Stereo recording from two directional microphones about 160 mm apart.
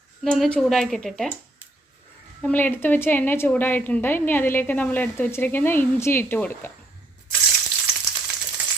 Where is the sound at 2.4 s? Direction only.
10° left (ahead or behind).